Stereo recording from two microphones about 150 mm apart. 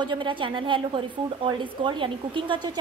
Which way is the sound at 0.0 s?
30° right (ahead or behind).